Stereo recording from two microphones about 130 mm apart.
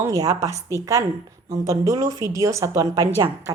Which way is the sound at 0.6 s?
20° left (ahead or behind).